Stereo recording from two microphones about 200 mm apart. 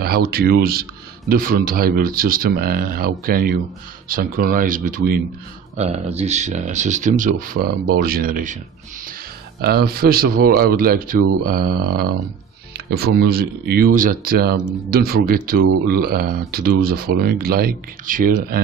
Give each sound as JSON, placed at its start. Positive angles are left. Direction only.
{"t": 0.0, "sound": "speech", "side_deg": -50}
{"t": 5.8, "sound": "speech", "side_deg": -30}
{"t": 9.6, "sound": "speech", "side_deg": -50}